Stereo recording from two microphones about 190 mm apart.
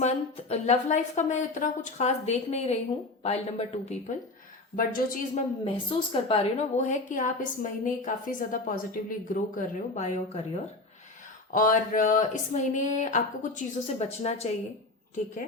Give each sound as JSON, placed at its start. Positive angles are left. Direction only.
{"t": 0.0, "sound": "a woman's voice", "side_deg": 35}
{"t": 4.8, "sound": "speech", "side_deg": 45}
{"t": 5.3, "sound": "a woman's voice", "side_deg": 30}